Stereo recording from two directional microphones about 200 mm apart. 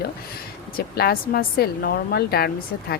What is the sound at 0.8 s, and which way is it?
A woman's voice, 50° left (ahead or behind).